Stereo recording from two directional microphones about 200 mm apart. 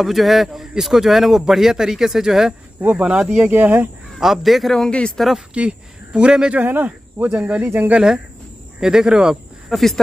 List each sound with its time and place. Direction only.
0.0 s speech: centre (ahead or behind)